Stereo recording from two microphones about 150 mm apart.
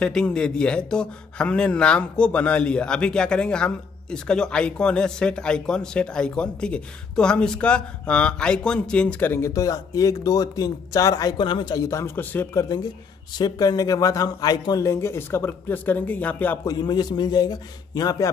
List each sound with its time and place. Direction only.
0.0 s speech: 5° left (ahead or behind)
13.4 s speech: 25° left (ahead or behind); by 16.5 s 10° left (ahead or behind)
16.6 s speech: 25° left (ahead or behind)